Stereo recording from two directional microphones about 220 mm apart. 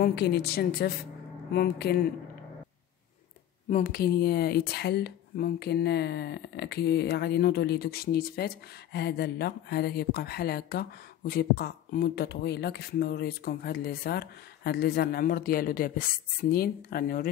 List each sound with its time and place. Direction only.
0.0 s speech: 45° left (ahead or behind)
3.7 s speech: 40° left (ahead or behind)